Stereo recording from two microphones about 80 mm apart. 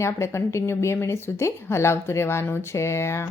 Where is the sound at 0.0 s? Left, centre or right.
Left.